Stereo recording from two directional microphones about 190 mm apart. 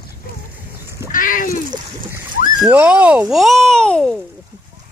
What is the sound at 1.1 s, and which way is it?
Speech, 45° left (ahead or behind).